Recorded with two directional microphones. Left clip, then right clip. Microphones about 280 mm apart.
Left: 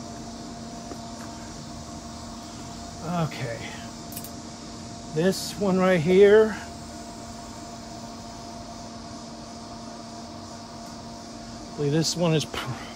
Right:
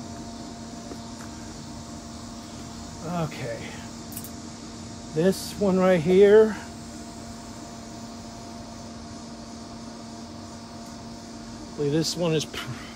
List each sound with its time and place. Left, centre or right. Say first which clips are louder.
3.1 s speech: left 1 dB; left
5.1 s speech: right 1 dB; left
11.8 s speech: even; left